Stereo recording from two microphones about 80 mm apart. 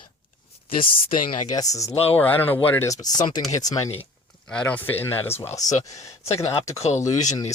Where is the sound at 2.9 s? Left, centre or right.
Left.